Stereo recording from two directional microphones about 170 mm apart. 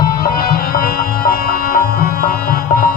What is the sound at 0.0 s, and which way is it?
Music, 60° left (ahead or behind).